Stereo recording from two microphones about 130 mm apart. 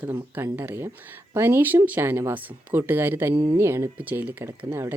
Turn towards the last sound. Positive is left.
turn(degrees=-15)  # may be behind; listen again after turning